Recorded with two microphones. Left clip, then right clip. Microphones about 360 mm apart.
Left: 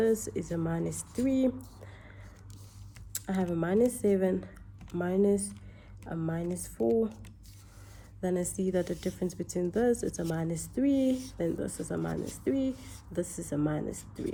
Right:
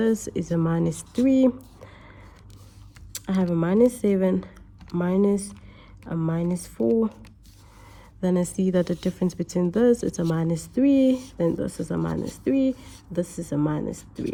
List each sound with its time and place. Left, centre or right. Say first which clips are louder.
0.0 s speech: right 3 dB; right
3.1 s speech: right 6 dB; right
6.8 s speech: right 5 dB; right
8.2 s speech: right 6 dB; right